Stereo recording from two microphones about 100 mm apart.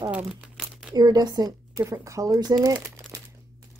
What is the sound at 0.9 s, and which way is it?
Speech, 45° right (ahead or behind).